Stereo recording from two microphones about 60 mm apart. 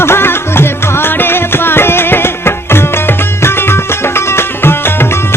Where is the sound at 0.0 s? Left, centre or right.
Left.